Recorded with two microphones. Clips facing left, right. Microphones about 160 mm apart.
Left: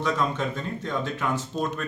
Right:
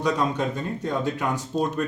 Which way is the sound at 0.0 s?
15° right (ahead or behind).